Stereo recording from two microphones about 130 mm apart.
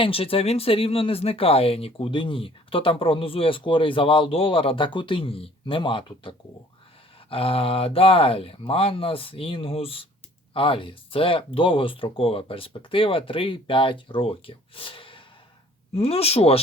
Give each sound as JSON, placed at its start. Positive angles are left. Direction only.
{"t": 0.0, "sound": "speech", "side_deg": 45}